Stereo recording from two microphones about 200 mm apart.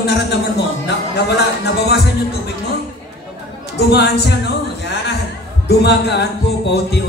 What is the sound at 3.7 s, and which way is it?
Music, 55° left (ahead or behind).